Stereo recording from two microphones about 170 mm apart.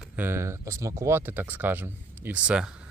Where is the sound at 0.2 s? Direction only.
15° right (ahead or behind).